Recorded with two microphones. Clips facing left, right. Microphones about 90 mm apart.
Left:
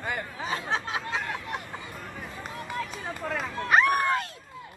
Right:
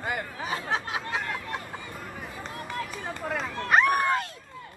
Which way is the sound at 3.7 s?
Centre (ahead or behind).